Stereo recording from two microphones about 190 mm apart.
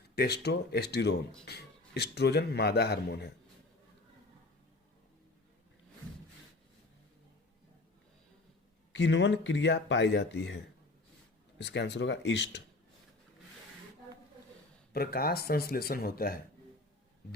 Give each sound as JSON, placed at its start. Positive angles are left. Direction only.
{"t": 0.2, "sound": "speech", "side_deg": 60}
{"t": 8.9, "sound": "speech", "side_deg": 70}
{"t": 14.9, "sound": "speech", "side_deg": 55}